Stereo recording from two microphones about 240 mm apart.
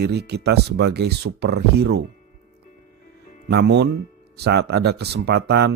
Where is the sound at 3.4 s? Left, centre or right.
Right.